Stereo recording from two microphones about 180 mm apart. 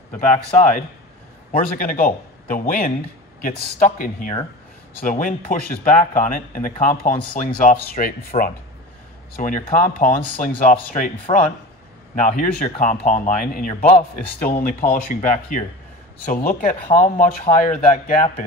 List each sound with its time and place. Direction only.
0.3 s speech: 45° left (ahead or behind)
11.3 s speech: 30° left (ahead or behind)
12.2 s speech: 40° left (ahead or behind)